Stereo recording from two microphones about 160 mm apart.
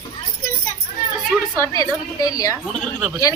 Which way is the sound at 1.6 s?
20° left (ahead or behind).